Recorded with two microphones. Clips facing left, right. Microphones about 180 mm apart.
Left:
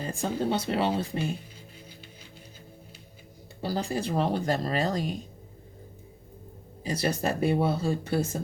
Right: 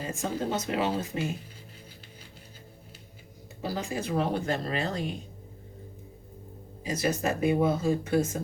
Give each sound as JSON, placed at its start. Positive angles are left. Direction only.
{"t": 0.2, "sound": "speech", "side_deg": 35}
{"t": 3.6, "sound": "speech", "side_deg": 35}
{"t": 6.9, "sound": "speech", "side_deg": 35}